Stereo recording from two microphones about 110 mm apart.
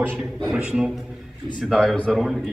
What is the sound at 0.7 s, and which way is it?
Speech, centre (ahead or behind).